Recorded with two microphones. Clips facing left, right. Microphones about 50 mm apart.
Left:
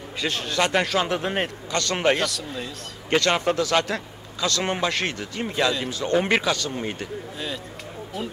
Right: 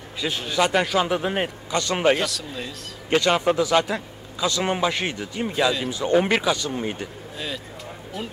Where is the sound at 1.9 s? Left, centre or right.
Centre.